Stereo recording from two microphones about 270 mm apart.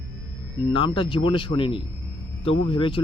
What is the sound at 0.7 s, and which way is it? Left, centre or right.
Speech, centre.